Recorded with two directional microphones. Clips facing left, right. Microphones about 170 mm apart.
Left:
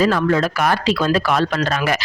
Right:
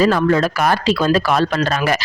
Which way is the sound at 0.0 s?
35° right (ahead or behind).